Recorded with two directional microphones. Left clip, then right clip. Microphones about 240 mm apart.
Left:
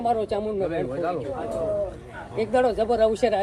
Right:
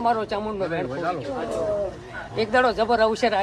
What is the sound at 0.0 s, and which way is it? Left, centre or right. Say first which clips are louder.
Speech: right 1 dB; centre.